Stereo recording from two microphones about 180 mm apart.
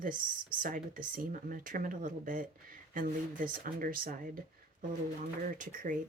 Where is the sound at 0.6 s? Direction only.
50° right (ahead or behind).